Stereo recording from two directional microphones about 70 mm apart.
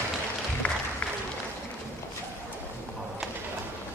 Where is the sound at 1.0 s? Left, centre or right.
Centre.